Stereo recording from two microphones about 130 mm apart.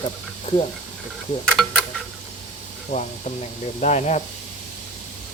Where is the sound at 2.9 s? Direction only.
65° left (ahead or behind).